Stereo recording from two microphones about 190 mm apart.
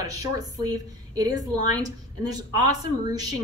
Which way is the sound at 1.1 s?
20° right (ahead or behind).